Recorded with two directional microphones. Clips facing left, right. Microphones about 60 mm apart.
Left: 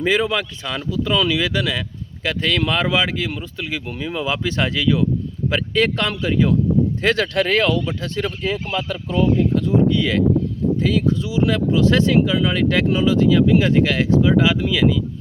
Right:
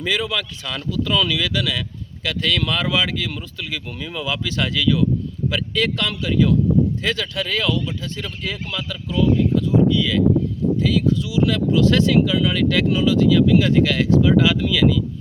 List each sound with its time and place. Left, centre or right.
0.0 s speech: left
7.0 s speech: left
8.4 s speech: left
8.9 s speech: left
10.8 s speech: left